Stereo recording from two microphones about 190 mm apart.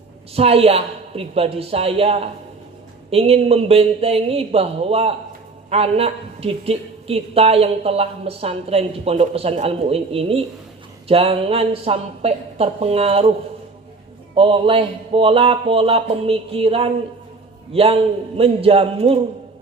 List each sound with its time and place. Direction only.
0.3 s a woman's voice: 30° right (ahead or behind)
14.3 s speech: 30° right (ahead or behind)